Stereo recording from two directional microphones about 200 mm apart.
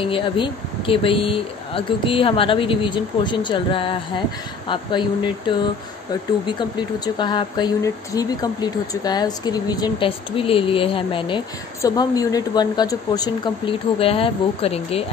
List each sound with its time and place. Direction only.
0.0 s speech: 25° left (ahead or behind)
7.2 s speech: 20° left (ahead or behind)